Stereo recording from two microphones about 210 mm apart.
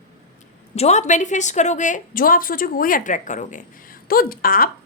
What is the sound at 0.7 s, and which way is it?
A woman's voice, 30° left (ahead or behind).